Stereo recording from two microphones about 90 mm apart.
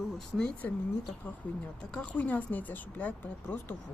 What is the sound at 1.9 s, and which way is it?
Speech, 15° left (ahead or behind).